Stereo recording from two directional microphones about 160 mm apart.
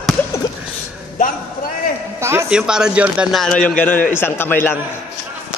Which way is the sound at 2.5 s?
5° right (ahead or behind).